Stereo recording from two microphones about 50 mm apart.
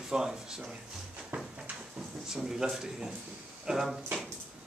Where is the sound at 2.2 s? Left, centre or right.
Centre.